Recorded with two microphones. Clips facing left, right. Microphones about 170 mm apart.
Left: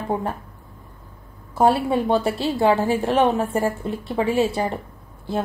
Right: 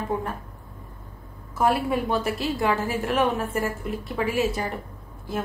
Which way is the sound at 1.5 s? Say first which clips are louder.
Left 4 dB; 30° left (ahead or behind).